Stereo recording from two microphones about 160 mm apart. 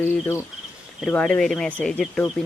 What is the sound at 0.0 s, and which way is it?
Speech, 15° left (ahead or behind).